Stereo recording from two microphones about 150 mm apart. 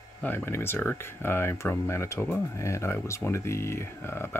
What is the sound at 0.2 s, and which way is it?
Speech, 10° left (ahead or behind).